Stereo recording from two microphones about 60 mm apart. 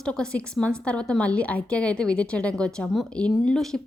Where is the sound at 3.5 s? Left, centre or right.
Centre.